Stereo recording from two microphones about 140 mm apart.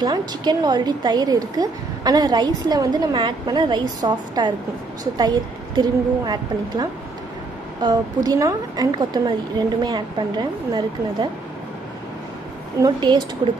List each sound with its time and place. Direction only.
0.0 s a woman's voice: 30° right (ahead or behind)
12.8 s a woman's voice: 30° right (ahead or behind)